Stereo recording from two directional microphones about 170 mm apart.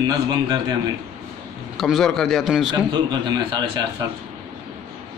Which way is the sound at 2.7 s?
25° right (ahead or behind).